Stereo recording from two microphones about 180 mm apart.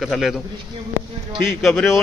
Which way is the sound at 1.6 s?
Centre (ahead or behind).